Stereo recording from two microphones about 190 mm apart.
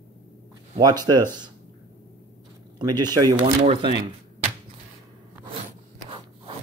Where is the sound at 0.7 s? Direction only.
20° right (ahead or behind).